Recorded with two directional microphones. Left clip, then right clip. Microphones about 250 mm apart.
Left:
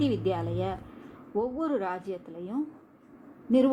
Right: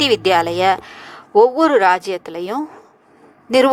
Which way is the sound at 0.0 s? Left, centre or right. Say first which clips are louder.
Right 15 dB; right.